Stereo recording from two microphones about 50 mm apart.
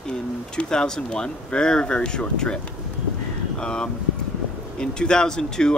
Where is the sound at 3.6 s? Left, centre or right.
Centre.